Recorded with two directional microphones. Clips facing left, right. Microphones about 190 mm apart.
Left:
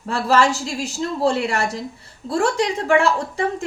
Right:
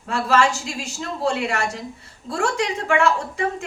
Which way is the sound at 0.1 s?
35° left (ahead or behind).